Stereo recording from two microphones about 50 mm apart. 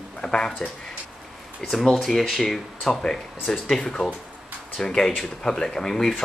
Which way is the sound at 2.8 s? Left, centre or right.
Centre.